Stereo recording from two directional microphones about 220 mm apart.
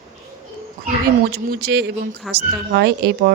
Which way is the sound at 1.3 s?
45° right (ahead or behind).